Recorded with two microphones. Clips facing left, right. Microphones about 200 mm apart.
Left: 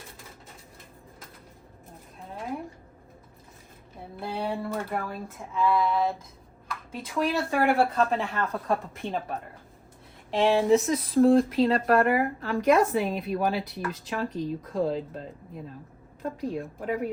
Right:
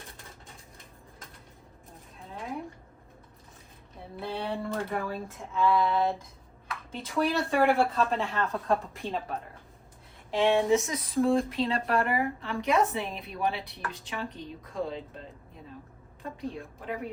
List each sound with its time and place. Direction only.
2.3 s a sound: centre (ahead or behind)
4.2 s speech: centre (ahead or behind)
10.4 s speech: centre (ahead or behind)
11.6 s speech: 45° left (ahead or behind)
13.0 s speech: centre (ahead or behind)
16.4 s speech: centre (ahead or behind)